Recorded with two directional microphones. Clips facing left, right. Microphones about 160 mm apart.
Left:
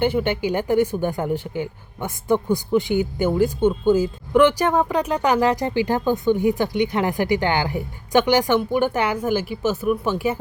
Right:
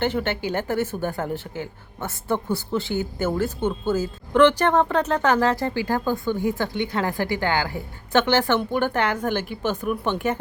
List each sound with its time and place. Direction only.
0.0 s speech: 10° left (ahead or behind)